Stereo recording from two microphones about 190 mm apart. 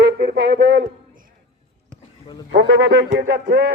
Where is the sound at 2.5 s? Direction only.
70° right (ahead or behind).